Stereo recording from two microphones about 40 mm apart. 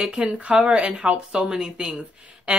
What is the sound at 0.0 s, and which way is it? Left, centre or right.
Speech, centre.